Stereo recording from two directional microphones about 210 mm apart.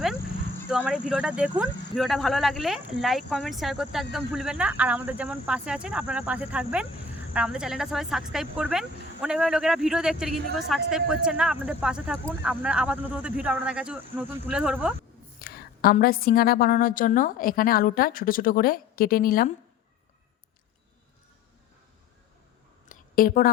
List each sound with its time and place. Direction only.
0.9 s speech: 5° right (ahead or behind)
15.4 s a woman's voice: 45° left (ahead or behind)
22.9 s a sound: 45° left (ahead or behind)